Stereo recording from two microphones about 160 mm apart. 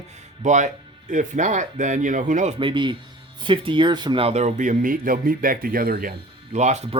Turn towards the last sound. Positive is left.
turn(degrees=-45)  # may be behind; listen again after turning